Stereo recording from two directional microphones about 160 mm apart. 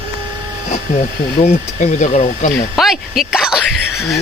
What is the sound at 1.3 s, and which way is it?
Speech, 45° left (ahead or behind).